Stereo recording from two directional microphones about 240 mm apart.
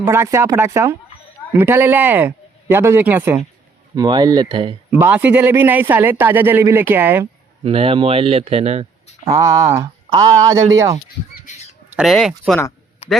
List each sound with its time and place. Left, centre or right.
0.0 s speech: centre
4.9 s speech: centre
7.6 s speech: right
9.3 s speech: centre
11.3 s chicken: left
11.9 s speech: centre